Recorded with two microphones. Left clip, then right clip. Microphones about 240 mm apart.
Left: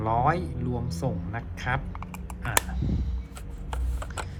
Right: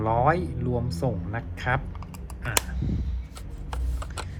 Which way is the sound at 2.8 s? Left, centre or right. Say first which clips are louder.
Even; left.